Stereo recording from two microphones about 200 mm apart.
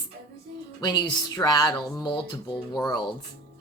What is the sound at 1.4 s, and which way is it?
Speech, 20° left (ahead or behind).